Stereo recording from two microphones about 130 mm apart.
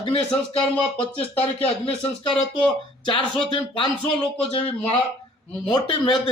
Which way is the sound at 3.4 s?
40° left (ahead or behind).